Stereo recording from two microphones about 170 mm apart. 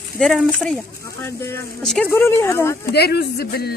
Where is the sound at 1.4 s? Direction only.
15° left (ahead or behind).